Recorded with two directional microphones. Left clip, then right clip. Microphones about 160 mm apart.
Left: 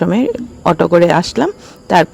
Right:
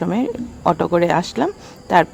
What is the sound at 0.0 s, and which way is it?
Speech, 30° left (ahead or behind).